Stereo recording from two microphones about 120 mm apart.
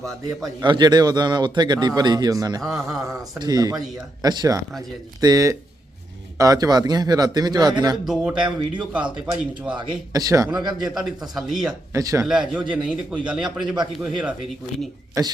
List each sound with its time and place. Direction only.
0.6 s a man's voice: 40° right (ahead or behind)
8.0 s a man's voice: 5° right (ahead or behind)
9.7 s a man's voice: 30° right (ahead or behind)
10.8 s a man's voice: centre (ahead or behind)
11.9 s speech: 30° right (ahead or behind)
12.2 s a man's voice: 5° right (ahead or behind)
15.2 s speech: 30° right (ahead or behind)